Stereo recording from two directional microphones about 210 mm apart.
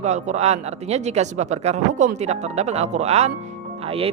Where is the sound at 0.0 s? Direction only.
35° right (ahead or behind).